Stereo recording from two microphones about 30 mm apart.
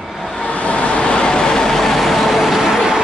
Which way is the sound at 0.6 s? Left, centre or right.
Left.